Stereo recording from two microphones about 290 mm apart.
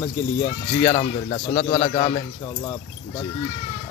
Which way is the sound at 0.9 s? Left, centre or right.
Left.